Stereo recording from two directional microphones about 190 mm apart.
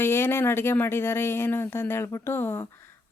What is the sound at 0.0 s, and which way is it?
Speech, 10° left (ahead or behind).